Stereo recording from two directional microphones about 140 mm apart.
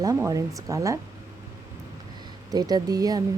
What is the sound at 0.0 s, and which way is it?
Speech, 25° right (ahead or behind).